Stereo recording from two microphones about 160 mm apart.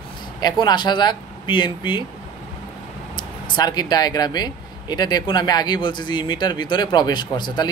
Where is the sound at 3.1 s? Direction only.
25° left (ahead or behind).